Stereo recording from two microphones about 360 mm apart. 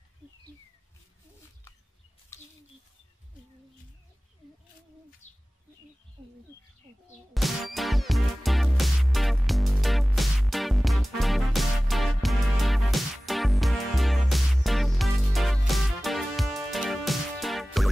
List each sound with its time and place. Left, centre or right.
2.3 s a sound: centre
5.2 s bird: left
7.3 s music: centre